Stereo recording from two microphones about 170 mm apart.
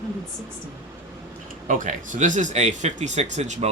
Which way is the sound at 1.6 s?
50° right (ahead or behind).